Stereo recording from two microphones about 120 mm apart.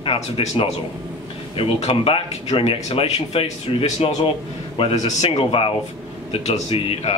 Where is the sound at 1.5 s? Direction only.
50° left (ahead or behind).